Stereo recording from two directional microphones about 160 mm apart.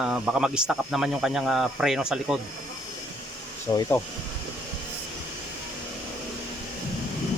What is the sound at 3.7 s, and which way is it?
Speech, 25° left (ahead or behind).